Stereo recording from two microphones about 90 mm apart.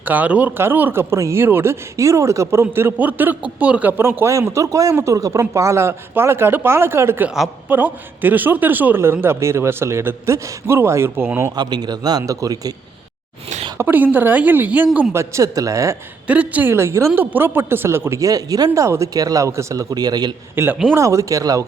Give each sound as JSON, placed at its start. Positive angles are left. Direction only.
{"t": 0.0, "sound": "speech", "side_deg": -15}
{"t": 7.3, "sound": "a woman's voice", "side_deg": -5}
{"t": 7.7, "sound": "speech", "side_deg": -20}
{"t": 11.5, "sound": "a man's voice", "side_deg": -50}
{"t": 13.7, "sound": "speech", "side_deg": -20}
{"t": 15.1, "sound": "speech", "side_deg": -30}
{"t": 16.2, "sound": "speech", "side_deg": -15}
{"t": 20.6, "sound": "speech", "side_deg": -25}